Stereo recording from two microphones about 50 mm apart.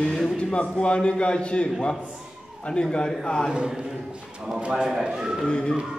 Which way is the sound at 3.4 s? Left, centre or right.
Centre.